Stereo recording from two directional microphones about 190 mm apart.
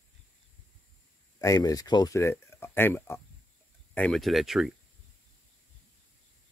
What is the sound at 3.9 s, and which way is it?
Speech, 5° left (ahead or behind).